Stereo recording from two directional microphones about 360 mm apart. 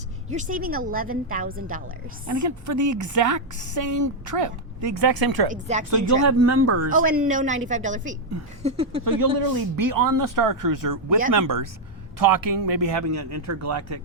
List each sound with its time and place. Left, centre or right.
0.3 s a woman's voice: centre
2.2 s a woman's voice: right
5.5 s a woman's voice: centre
5.9 s a woman's voice: right
6.9 s a woman's voice: right
9.0 s a woman's voice: right